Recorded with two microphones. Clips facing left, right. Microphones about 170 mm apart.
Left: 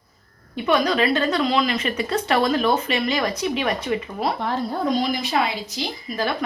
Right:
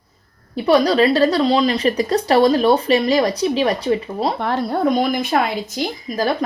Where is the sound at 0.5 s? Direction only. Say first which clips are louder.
Right 6 dB; 35° right (ahead or behind).